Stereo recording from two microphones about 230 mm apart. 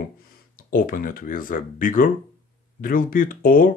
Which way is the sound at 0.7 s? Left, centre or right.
Left.